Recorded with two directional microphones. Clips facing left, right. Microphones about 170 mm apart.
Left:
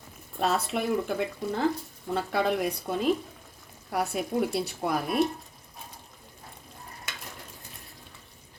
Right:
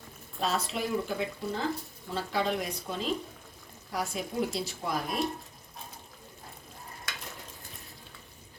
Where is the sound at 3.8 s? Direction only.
60° left (ahead or behind).